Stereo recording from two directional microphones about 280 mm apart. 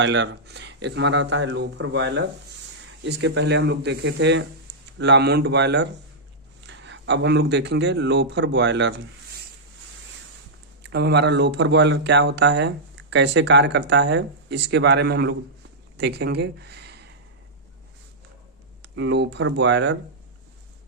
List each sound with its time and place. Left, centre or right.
0.0 s speech: right
10.8 s speech: right
18.8 s speech: right